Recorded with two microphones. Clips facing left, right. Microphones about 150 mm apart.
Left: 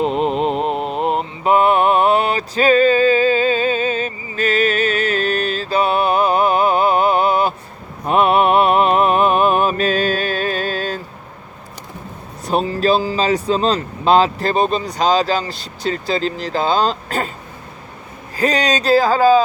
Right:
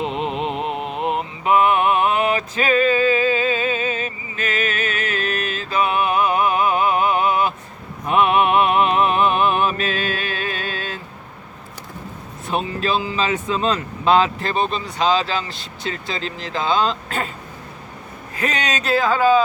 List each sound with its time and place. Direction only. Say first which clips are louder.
0.0 s mantra: left 6 dB; 40° left (ahead or behind)
8.0 s music: left 3 dB; 35° left (ahead or behind)
12.5 s speech: left 6 dB; 35° left (ahead or behind)
18.3 s speech: left 6 dB; 35° left (ahead or behind)